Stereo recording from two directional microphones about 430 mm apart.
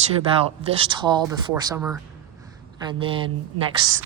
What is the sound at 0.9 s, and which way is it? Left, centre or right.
Speech, centre.